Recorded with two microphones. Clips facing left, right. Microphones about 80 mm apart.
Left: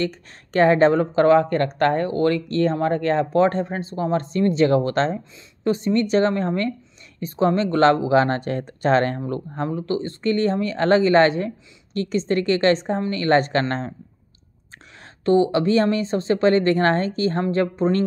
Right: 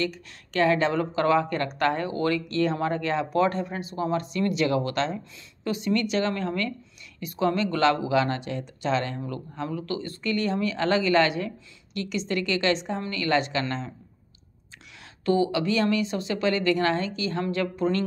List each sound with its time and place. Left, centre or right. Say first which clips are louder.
0.0 s speech: left 4 dB; left
15.2 s speech: left 6 dB; left